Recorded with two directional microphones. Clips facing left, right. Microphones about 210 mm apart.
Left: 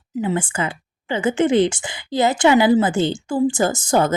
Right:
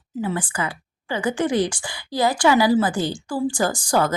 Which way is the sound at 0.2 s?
20° left (ahead or behind).